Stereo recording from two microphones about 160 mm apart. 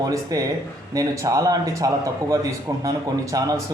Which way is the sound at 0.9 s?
20° right (ahead or behind).